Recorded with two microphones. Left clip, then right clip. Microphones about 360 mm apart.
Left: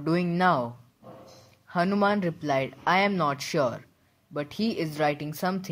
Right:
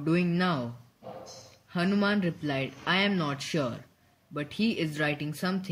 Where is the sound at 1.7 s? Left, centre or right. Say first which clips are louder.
Left 4 dB; centre.